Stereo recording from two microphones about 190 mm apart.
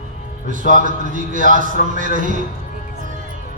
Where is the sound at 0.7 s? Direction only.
45° right (ahead or behind).